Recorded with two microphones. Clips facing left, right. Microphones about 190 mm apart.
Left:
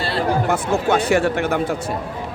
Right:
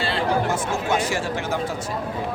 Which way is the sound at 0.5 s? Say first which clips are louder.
Left 5 dB; 60° left (ahead or behind).